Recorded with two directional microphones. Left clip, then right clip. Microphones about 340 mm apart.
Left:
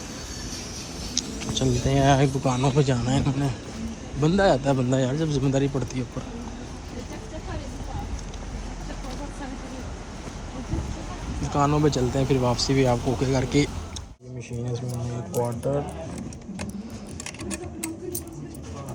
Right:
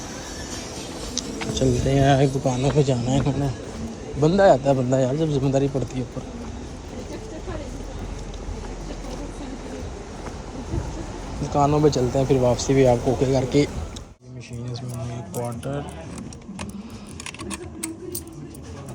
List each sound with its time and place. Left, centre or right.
1.5 s speech: centre
11.4 s speech: centre